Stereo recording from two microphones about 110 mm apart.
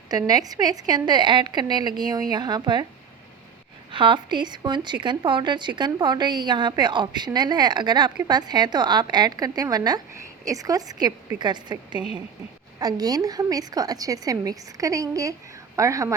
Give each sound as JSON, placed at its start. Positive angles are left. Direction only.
{"t": 0.1, "sound": "speech", "side_deg": -35}
{"t": 3.9, "sound": "speech", "side_deg": -45}